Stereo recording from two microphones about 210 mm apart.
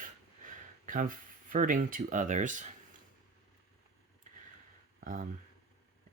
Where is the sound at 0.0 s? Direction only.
40° right (ahead or behind).